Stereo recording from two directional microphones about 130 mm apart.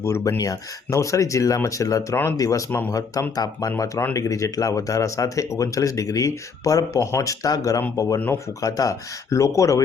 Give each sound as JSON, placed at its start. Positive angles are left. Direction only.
{"t": 0.0, "sound": "speech", "side_deg": 20}